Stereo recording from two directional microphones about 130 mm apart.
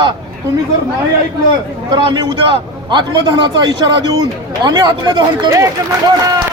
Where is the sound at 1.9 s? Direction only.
40° right (ahead or behind).